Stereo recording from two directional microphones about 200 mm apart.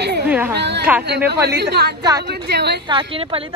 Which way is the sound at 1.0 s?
55° right (ahead or behind).